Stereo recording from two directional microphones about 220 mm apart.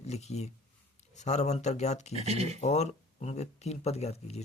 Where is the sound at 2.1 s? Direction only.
30° right (ahead or behind).